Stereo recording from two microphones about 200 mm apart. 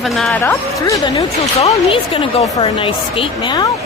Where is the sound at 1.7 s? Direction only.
25° left (ahead or behind).